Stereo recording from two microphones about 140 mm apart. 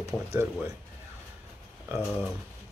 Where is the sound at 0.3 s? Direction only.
20° right (ahead or behind).